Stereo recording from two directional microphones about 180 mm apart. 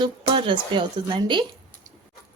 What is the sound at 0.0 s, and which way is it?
A woman's voice, 25° right (ahead or behind).